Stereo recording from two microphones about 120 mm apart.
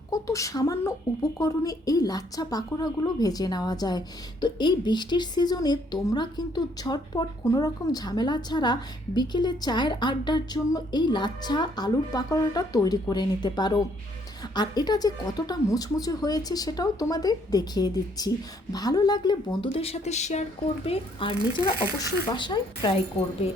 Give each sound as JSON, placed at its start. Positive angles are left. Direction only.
{"t": 0.1, "sound": "a woman's voice", "side_deg": 25}
{"t": 19.6, "sound": "speech", "side_deg": 55}
{"t": 20.8, "sound": "speech", "side_deg": 50}
{"t": 21.9, "sound": "a woman's voice", "side_deg": 35}